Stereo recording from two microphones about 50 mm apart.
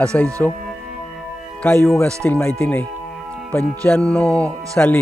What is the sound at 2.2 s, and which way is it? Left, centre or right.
Speech, left.